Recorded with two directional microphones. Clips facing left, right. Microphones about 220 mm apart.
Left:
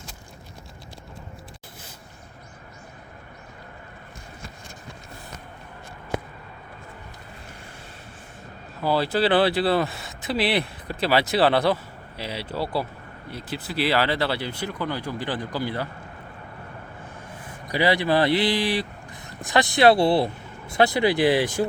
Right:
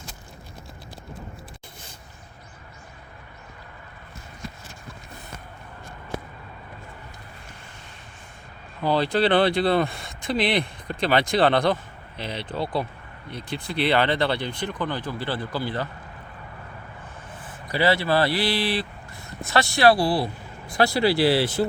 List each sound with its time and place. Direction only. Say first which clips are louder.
8.8 s speech: right 1 dB; 5° left (ahead or behind)
17.3 s speech: left 1 dB; 15° left (ahead or behind)